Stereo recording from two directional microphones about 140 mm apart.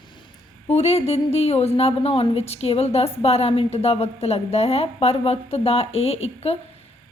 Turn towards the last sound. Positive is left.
turn(degrees=50)  # may be behind; listen again after turning